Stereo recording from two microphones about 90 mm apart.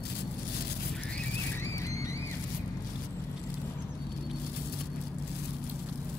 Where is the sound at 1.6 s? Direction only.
35° left (ahead or behind).